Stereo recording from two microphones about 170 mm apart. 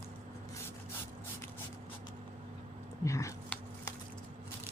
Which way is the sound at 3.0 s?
15° left (ahead or behind).